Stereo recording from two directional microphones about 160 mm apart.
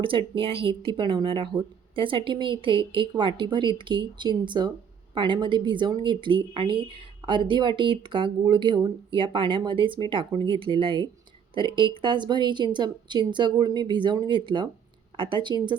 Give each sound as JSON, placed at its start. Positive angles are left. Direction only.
{"t": 0.0, "sound": "speech", "side_deg": -30}